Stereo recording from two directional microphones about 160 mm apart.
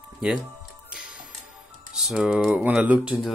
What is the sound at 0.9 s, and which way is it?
Music, 5° right (ahead or behind).